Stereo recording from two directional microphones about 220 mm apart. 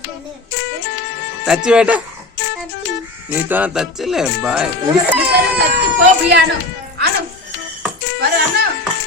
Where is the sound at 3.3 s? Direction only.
10° right (ahead or behind).